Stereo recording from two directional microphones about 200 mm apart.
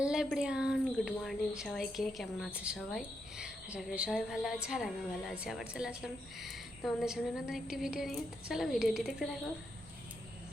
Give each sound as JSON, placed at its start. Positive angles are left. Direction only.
{"t": 0.0, "sound": "speech", "side_deg": -5}